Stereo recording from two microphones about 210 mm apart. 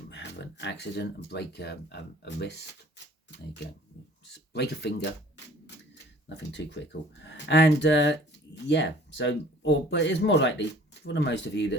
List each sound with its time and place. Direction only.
0.1 s speech: 55° left (ahead or behind)
4.3 s speech: 50° left (ahead or behind)
6.2 s speech: 55° left (ahead or behind)